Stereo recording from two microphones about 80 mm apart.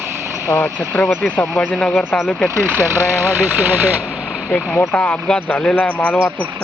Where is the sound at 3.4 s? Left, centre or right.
Right.